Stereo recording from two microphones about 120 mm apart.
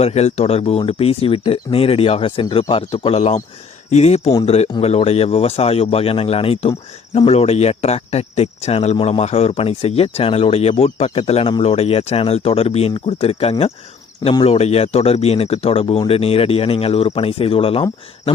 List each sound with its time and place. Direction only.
0.0 s speech: 60° left (ahead or behind)